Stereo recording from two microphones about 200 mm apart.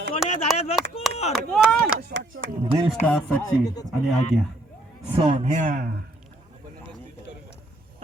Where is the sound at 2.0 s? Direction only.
50° right (ahead or behind).